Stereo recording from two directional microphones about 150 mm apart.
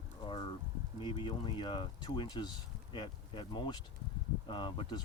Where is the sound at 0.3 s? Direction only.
35° left (ahead or behind).